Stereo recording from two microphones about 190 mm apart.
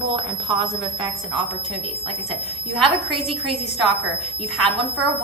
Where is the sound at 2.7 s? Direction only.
Centre (ahead or behind).